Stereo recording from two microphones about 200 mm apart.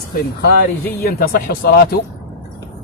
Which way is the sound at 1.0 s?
50° left (ahead or behind).